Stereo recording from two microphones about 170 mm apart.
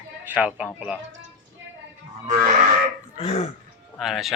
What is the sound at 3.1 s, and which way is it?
Speech, 40° left (ahead or behind).